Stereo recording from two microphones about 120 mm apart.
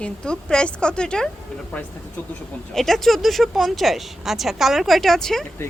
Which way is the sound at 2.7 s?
Centre (ahead or behind).